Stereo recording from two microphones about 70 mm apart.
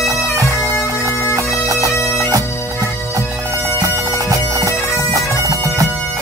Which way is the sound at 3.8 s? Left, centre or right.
Right.